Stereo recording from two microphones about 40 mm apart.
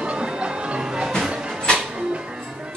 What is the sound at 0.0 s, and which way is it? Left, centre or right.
Music, right.